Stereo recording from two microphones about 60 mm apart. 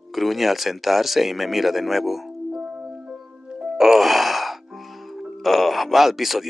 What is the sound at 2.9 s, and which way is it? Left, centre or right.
Sigh, centre.